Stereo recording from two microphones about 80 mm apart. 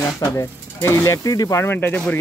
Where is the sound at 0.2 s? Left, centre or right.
Left.